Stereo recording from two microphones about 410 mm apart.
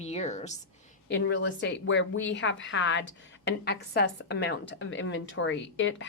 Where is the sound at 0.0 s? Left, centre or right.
Centre.